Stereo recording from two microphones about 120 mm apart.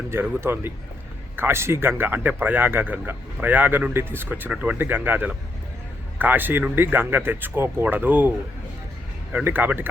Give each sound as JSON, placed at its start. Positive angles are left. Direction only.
{"t": 0.1, "sound": "speech", "side_deg": -20}
{"t": 9.3, "sound": "speech", "side_deg": -15}